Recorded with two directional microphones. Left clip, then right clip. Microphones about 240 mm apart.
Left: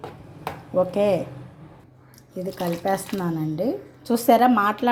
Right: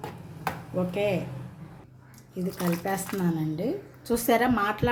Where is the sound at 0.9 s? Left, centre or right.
Left.